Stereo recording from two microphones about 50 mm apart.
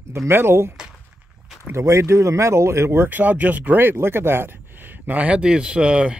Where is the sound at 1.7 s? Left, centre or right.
Right.